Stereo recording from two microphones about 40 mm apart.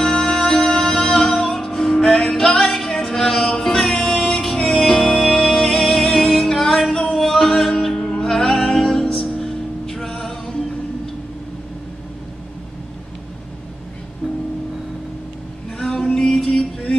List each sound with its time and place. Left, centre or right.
0.0 s music: centre
14.2 s music: right
15.8 s music: centre